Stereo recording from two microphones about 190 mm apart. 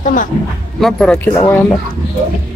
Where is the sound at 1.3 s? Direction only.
15° left (ahead or behind).